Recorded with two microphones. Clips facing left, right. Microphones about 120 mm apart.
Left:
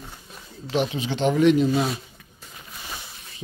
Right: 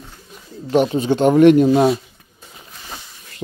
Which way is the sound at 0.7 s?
45° right (ahead or behind).